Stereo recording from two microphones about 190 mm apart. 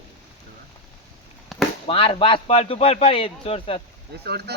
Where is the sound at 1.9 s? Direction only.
30° left (ahead or behind).